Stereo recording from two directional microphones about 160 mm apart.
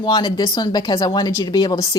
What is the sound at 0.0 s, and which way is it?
Speech, 25° left (ahead or behind).